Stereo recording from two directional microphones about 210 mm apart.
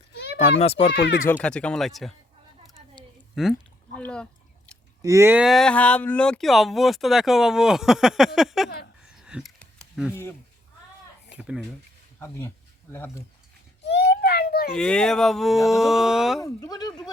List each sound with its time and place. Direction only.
0.1 s children playing: 55° left (ahead or behind)
0.6 s speech: 30° left (ahead or behind)
0.9 s speech: 50° left (ahead or behind)
1.2 s speech: 10° left (ahead or behind)
3.4 s speech: centre (ahead or behind)
3.9 s drip: 5° left (ahead or behind)
5.0 s speech: 15° right (ahead or behind)
9.2 s a sound: 5° right (ahead or behind)
10.1 s speech: 10° left (ahead or behind)
11.3 s speech: 5° right (ahead or behind)
13.8 s a sound: 50° left (ahead or behind)
14.8 s speech: 5° left (ahead or behind)
16.4 s speech: 15° left (ahead or behind)